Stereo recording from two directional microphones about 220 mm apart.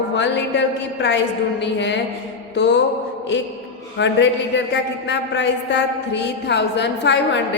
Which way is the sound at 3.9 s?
55° left (ahead or behind).